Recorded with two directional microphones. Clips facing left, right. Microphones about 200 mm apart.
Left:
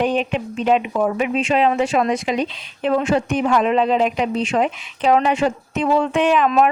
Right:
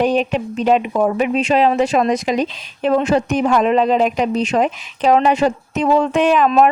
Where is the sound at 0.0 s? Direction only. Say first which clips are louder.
Right 3 dB; 40° right (ahead or behind).